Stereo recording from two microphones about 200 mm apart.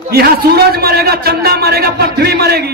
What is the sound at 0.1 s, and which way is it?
A man's voice, 50° right (ahead or behind).